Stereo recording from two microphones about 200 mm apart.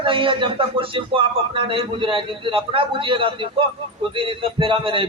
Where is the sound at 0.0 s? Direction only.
25° right (ahead or behind).